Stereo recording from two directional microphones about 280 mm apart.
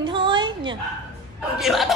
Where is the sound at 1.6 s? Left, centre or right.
Centre.